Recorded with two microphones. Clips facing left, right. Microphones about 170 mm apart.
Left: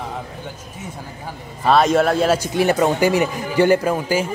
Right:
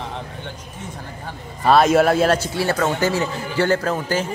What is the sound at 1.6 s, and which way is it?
Speech, centre (ahead or behind).